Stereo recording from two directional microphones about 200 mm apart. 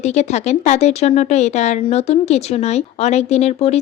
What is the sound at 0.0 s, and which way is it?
Speech, 35° left (ahead or behind).